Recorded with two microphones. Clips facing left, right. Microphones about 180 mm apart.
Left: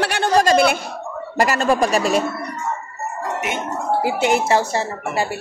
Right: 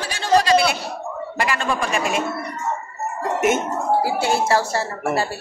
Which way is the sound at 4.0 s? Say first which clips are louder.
Left 2 dB; 20° left (ahead or behind).